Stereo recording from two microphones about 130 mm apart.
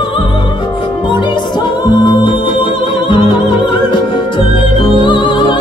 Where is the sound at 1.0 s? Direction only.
35° left (ahead or behind).